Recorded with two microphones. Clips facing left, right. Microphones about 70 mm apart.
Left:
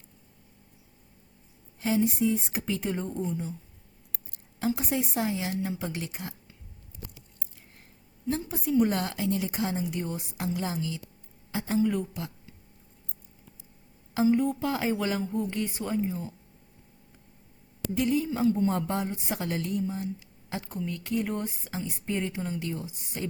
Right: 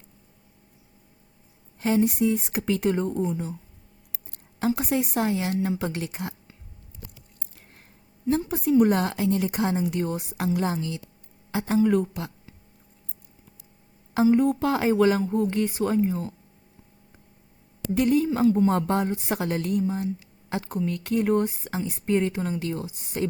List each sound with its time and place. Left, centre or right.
1.8 s speech: right
4.3 s a woman's voice: right
8.4 s a woman's voice: right
9.9 s speech: right
11.5 s speech: right
14.3 s speech: right
17.9 s speech: right
20.6 s a woman's voice: right
22.6 s a woman's voice: right